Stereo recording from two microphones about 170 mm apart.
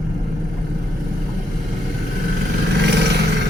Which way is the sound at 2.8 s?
85° right.